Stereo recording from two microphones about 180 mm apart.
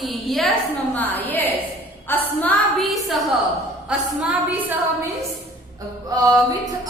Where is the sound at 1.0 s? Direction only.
10° left (ahead or behind); by 4.7 s 10° right (ahead or behind).